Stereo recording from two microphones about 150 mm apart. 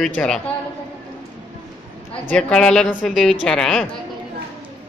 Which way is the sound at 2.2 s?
5° left (ahead or behind).